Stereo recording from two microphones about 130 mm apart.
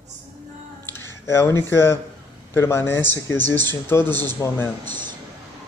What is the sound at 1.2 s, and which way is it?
Speech, 20° left (ahead or behind).